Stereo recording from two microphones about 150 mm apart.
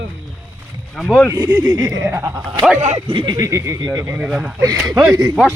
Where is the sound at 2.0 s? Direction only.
10° right (ahead or behind).